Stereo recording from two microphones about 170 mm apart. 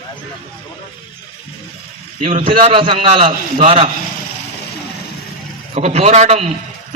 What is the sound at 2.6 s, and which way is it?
A man's voice, 30° right (ahead or behind).